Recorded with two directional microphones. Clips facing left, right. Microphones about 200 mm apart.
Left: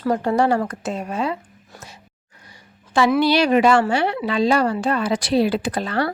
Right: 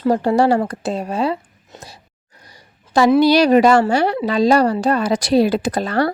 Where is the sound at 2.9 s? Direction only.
40° right (ahead or behind).